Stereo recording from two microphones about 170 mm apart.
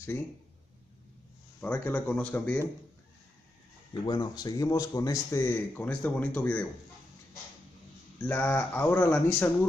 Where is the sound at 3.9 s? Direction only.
25° left (ahead or behind); by 6.7 s 10° left (ahead or behind).